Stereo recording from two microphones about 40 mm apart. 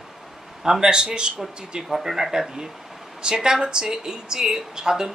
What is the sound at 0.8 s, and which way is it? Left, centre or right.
Speech, right.